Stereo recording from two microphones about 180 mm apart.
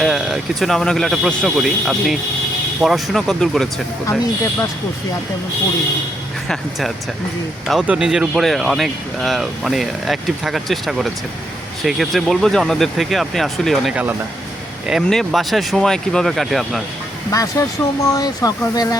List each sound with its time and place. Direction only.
0.0 s speech: centre (ahead or behind)
6.5 s speech: centre (ahead or behind)
17.3 s speech: 15° left (ahead or behind)